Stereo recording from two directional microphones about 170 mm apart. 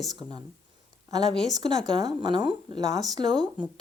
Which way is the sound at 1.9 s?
30° right (ahead or behind).